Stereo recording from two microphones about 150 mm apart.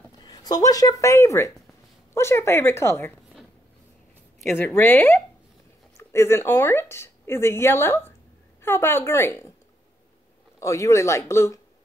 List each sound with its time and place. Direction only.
0.2 s speech: 25° left (ahead or behind)
4.6 s speech: 15° left (ahead or behind)
10.6 s speech: 20° left (ahead or behind)